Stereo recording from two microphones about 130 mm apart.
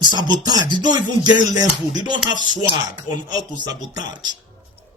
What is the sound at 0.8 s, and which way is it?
Speech, 35° right (ahead or behind).